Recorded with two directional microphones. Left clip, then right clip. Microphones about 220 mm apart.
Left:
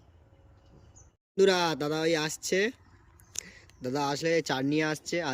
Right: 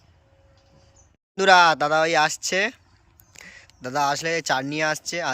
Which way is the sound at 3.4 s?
5° left (ahead or behind).